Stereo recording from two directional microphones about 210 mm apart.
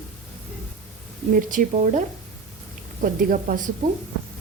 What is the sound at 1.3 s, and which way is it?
Speech, 35° right (ahead or behind).